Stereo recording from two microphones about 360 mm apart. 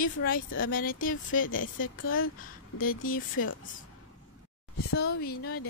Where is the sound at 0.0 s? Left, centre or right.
Left.